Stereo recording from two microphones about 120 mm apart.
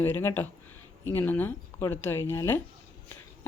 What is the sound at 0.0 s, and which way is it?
A woman's voice, 20° left (ahead or behind).